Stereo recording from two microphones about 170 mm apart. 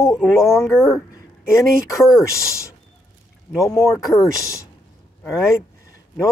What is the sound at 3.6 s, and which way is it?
Speech, 20° left (ahead or behind).